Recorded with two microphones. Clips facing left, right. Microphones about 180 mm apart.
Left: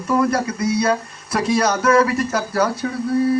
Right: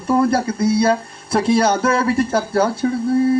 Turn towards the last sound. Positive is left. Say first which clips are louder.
# right 2 dB
turn(degrees=-25)  # may be behind; listen again after turning